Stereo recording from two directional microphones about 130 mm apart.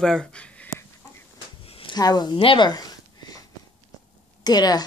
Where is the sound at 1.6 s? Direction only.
45° left (ahead or behind).